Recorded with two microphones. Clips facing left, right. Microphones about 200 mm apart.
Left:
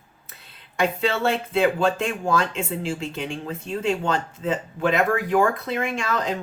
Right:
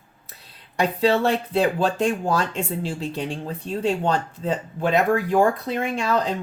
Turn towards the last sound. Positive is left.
turn(degrees=-35)  # may be behind; listen again after turning